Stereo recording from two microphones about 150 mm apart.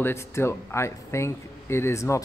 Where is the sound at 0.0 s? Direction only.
15° left (ahead or behind).